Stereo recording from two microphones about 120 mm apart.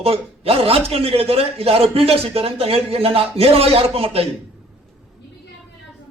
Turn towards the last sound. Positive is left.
turn(degrees=-55)  # may be behind; listen again after turning